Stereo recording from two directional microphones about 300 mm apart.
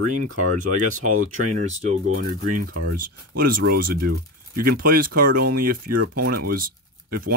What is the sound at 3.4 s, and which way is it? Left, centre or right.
Speech, right.